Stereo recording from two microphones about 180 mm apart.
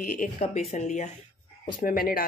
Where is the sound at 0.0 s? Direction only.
45° left (ahead or behind).